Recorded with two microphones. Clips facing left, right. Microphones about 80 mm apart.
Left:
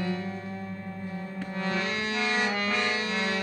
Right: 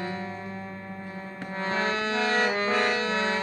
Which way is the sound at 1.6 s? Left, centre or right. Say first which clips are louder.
Right 3 dB; right.